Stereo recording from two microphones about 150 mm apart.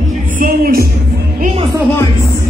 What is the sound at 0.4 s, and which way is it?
Speech, 80° right.